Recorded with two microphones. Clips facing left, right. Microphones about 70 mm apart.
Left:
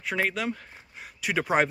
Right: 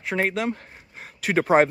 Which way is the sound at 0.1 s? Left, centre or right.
Right.